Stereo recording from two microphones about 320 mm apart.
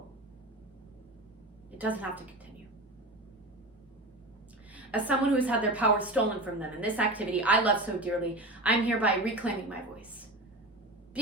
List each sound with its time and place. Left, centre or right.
1.8 s a woman's voice: centre
4.7 s a woman's voice: centre